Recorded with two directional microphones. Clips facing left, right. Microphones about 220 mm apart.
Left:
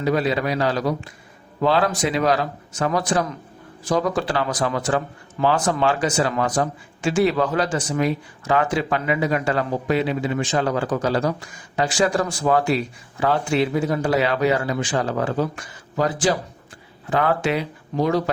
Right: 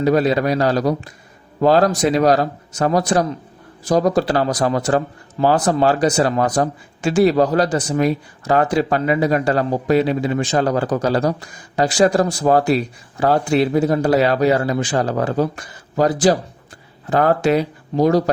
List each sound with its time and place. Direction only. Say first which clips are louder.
0.0 s speech: right 5 dB; 40° right (ahead or behind)